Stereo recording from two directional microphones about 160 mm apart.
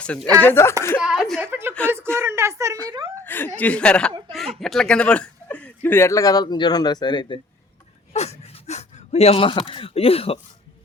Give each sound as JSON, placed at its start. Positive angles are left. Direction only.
{"t": 0.0, "sound": "speech", "side_deg": 5}
{"t": 1.0, "sound": "speech", "side_deg": -5}
{"t": 2.1, "sound": "a sound", "side_deg": -15}
{"t": 3.2, "sound": "speech", "side_deg": 10}
{"t": 8.1, "sound": "speech", "side_deg": 45}